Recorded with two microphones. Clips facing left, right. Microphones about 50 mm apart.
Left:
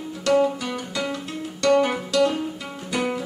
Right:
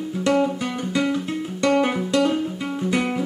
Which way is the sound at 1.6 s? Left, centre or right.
Right.